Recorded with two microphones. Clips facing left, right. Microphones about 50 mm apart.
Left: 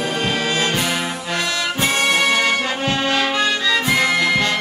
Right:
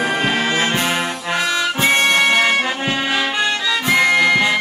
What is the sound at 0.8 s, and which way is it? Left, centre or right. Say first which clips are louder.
Brass instrument: right 2 dB; centre.